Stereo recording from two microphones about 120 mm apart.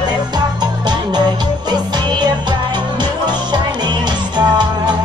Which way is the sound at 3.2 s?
35° right (ahead or behind).